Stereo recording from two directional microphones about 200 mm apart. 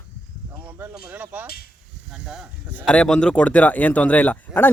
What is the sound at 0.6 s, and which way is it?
Speech, 10° right (ahead or behind).